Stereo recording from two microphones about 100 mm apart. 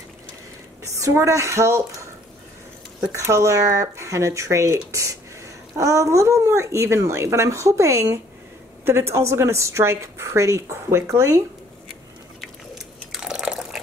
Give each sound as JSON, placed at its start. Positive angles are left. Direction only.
{"t": 0.8, "sound": "a woman's voice", "side_deg": -30}
{"t": 3.1, "sound": "a woman's voice", "side_deg": -30}
{"t": 12.4, "sound": "a sound", "side_deg": -5}